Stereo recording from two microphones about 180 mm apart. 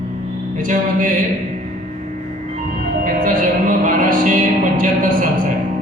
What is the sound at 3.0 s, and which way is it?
Music, 50° right (ahead or behind).